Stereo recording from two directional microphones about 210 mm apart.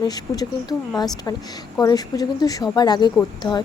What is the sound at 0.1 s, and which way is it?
A woman's voice, 20° left (ahead or behind).